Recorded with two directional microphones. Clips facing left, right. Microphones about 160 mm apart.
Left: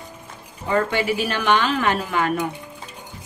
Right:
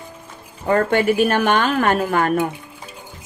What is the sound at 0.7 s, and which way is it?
A woman's voice, 50° right (ahead or behind).